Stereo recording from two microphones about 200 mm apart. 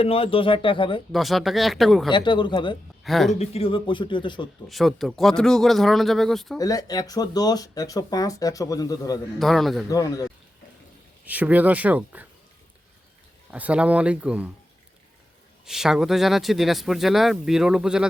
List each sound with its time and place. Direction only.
0.0 s speech: 30° left (ahead or behind)
1.1 s speech: centre (ahead or behind)
2.0 s speech: 25° left (ahead or behind)
3.0 s speech: centre (ahead or behind)
3.3 s speech: 30° left (ahead or behind)
4.7 s speech: centre (ahead or behind)
6.6 s speech: 20° left (ahead or behind)
9.4 s speech: centre (ahead or behind)
9.9 s speech: 20° left (ahead or behind)
11.3 s speech: 5° right (ahead or behind)
13.5 s speech: 5° right (ahead or behind)
15.6 s speech: centre (ahead or behind)